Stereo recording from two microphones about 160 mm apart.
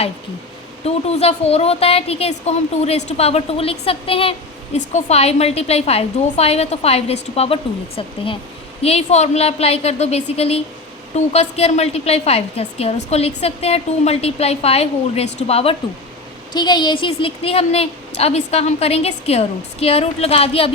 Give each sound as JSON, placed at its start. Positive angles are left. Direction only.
{"t": 0.9, "sound": "a woman's voice", "side_deg": 40}
{"t": 16.5, "sound": "a woman's voice", "side_deg": 25}